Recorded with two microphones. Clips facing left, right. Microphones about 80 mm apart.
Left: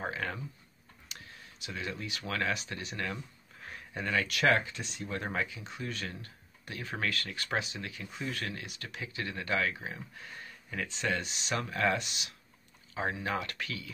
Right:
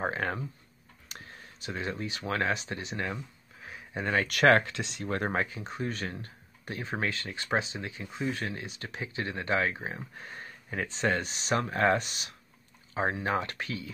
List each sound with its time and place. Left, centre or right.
0.0 s speech: right
4.3 s speech: right
5.0 s speech: right